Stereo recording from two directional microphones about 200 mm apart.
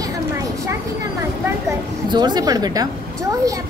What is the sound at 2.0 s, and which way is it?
Speech, 20° right (ahead or behind).